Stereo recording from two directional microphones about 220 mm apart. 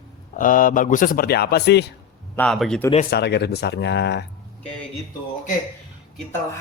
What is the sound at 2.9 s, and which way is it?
Speech, 40° left (ahead or behind).